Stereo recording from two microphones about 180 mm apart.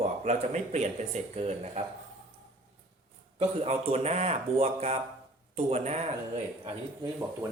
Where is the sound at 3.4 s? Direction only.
35° right (ahead or behind).